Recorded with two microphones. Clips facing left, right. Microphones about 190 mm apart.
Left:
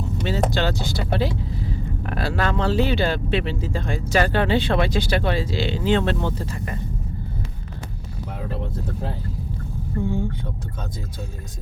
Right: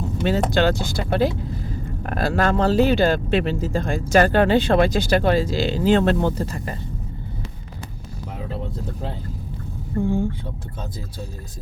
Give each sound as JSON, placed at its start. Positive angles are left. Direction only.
{"t": 0.2, "sound": "speech", "side_deg": -50}